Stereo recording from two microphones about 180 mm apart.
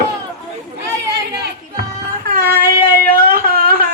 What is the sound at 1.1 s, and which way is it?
Chatter, 65° right (ahead or behind).